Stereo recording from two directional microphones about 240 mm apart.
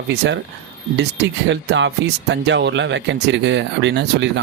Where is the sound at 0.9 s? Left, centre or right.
Right.